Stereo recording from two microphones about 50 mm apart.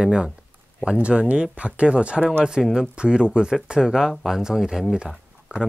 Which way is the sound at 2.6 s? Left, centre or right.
Centre.